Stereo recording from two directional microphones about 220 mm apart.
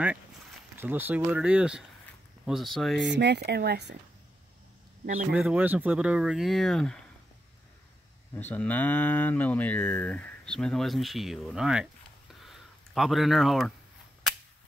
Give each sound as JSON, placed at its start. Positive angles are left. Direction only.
{"t": 0.7, "sound": "speech", "side_deg": -10}
{"t": 3.0, "sound": "speech", "side_deg": -50}
{"t": 5.3, "sound": "speech", "side_deg": -5}
{"t": 8.4, "sound": "speech", "side_deg": 10}